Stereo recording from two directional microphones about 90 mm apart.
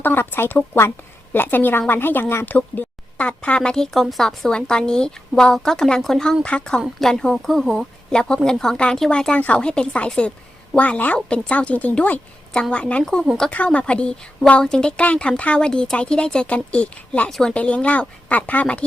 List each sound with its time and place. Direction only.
0.0 s a woman's voice: 20° left (ahead or behind)